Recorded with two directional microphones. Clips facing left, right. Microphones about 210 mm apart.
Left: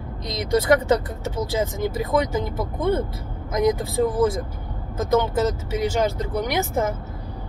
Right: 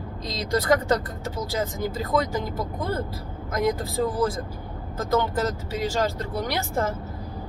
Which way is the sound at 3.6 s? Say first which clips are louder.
Left 4 dB; 20° left (ahead or behind).